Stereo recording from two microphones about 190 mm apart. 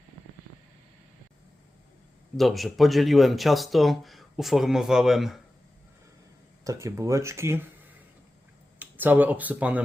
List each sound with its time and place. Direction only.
2.3 s speech: centre (ahead or behind)
6.7 s speech: 15° right (ahead or behind)
8.8 s speech: 10° right (ahead or behind)